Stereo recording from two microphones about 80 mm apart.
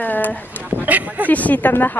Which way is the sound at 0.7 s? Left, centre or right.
Right.